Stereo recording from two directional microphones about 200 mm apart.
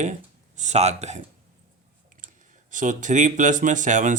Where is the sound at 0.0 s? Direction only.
35° right (ahead or behind).